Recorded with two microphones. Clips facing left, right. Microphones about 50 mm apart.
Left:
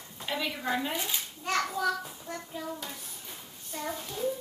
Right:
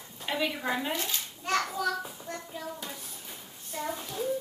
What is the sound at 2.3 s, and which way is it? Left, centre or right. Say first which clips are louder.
Speech: left 1 dB; centre.